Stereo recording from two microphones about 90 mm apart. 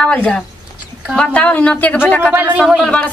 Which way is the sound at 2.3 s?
20° right (ahead or behind).